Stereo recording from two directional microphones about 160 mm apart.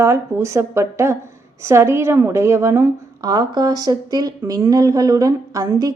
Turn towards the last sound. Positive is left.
turn(degrees=-25)  # may be behind; listen again after turning